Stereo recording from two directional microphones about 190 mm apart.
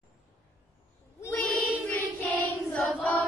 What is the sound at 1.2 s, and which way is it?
Child singing, 10° left (ahead or behind).